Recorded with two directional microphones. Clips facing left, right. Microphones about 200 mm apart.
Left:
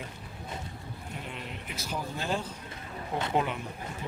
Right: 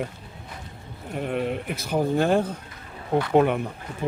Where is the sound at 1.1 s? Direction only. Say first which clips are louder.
Right 16 dB; 55° right (ahead or behind).